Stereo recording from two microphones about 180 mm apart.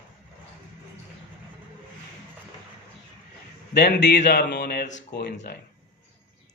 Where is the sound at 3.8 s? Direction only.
70° left (ahead or behind).